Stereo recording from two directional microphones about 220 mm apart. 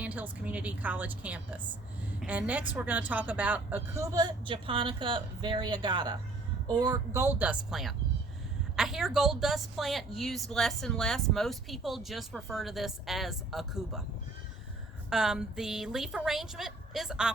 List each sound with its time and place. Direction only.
0.0 s a woman's voice: 5° right (ahead or behind)
15.1 s a woman's voice: centre (ahead or behind)